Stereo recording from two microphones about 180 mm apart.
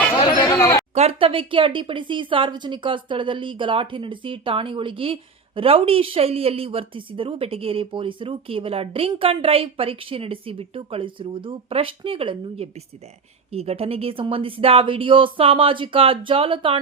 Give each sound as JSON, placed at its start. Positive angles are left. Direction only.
{"t": 0.3, "sound": "chatter", "side_deg": 20}
{"t": 0.9, "sound": "a woman's voice", "side_deg": -30}